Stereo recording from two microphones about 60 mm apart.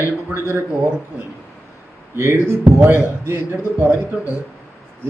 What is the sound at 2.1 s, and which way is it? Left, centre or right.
A man's voice, right.